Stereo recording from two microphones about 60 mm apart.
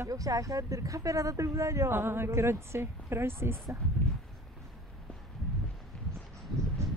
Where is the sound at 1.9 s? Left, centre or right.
Right.